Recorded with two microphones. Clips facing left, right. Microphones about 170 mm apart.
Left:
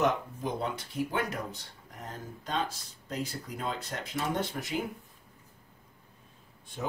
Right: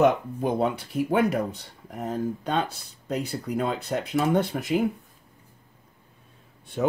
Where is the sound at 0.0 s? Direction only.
60° right (ahead or behind).